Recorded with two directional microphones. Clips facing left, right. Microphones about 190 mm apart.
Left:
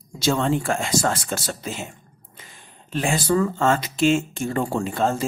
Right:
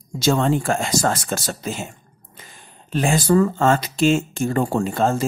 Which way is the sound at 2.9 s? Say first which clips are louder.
Right 4 dB; 40° right (ahead or behind).